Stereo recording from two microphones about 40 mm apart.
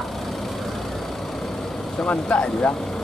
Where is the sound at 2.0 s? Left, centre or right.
Left.